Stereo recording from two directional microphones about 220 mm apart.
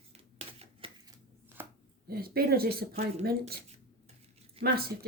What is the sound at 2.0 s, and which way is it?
Speech, 45° right (ahead or behind).